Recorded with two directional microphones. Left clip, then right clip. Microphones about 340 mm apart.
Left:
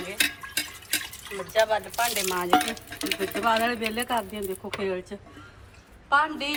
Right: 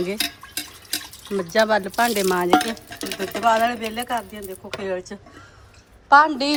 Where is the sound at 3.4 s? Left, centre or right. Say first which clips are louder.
Right 6 dB; centre.